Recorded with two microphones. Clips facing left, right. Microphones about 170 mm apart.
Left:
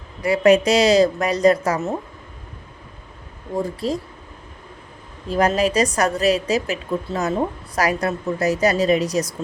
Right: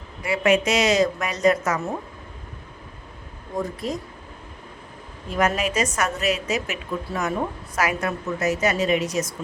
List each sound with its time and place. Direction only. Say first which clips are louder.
0.2 s a woman's voice: left 5 dB; 35° left (ahead or behind)
3.6 s a woman's voice: left 4 dB; 30° left (ahead or behind)
5.3 s a woman's voice: left 5 dB; 35° left (ahead or behind)